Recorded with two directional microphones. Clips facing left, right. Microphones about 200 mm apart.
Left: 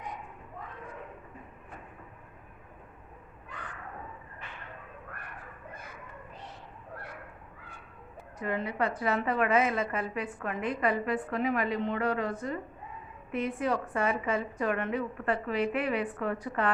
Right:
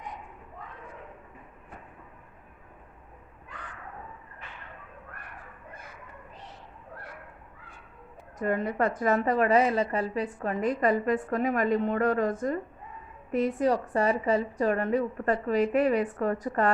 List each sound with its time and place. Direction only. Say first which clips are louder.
8.4 s a woman's voice: right 4 dB; 45° right (ahead or behind)